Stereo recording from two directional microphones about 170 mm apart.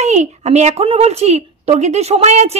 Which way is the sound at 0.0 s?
40° right (ahead or behind).